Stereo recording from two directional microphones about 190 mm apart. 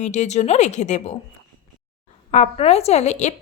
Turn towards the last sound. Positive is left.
turn(degrees=35)  # may be behind; listen again after turning